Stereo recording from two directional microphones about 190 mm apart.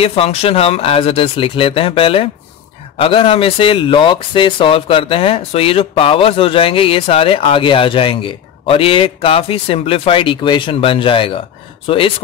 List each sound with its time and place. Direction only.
0.0 s speech: 30° left (ahead or behind)